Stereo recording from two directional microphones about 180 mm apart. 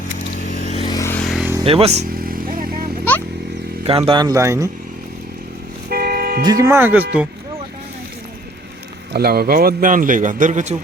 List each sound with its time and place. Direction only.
0.5 s a sound: 40° left (ahead or behind)
0.9 s a sound: 15° left (ahead or behind)
1.2 s vehicle: centre (ahead or behind)
1.6 s speech: 35° right (ahead or behind)
2.0 s vehicle: 55° right (ahead or behind)
3.8 s speech: 30° right (ahead or behind)
5.9 s vehicle: 60° right (ahead or behind)
6.4 s speech: 20° right (ahead or behind)
9.1 s a man's voice: 60° right (ahead or behind); by 10.8 s 40° right (ahead or behind)